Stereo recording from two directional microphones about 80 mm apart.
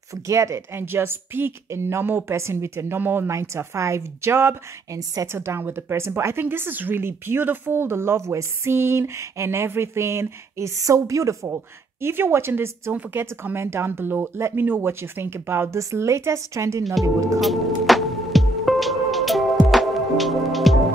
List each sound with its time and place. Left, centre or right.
0.1 s speech: right
3.3 s speech: right
4.9 s speech: right
5.3 s speech: right
17.4 s music: centre